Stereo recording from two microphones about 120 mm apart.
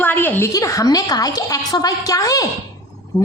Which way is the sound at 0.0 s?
15° left (ahead or behind).